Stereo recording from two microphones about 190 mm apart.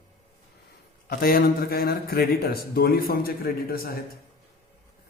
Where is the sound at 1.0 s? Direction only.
50° left (ahead or behind).